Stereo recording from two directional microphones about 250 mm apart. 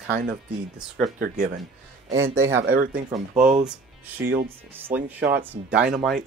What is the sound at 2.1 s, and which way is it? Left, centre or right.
Speech, centre.